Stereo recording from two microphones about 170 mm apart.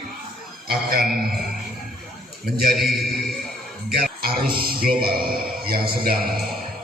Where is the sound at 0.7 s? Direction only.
60° right (ahead or behind).